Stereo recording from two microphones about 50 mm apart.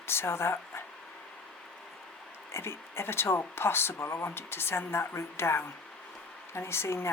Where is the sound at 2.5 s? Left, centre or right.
Left.